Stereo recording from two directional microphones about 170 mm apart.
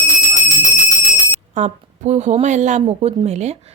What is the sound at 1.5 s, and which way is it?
A woman's voice, 40° right (ahead or behind).